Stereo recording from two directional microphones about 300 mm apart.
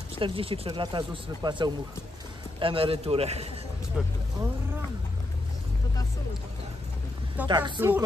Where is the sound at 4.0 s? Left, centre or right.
Centre.